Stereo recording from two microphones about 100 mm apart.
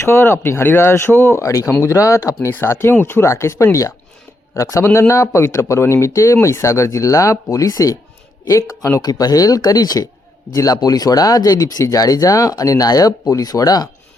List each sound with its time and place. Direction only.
0.0 s speech: 25° left (ahead or behind)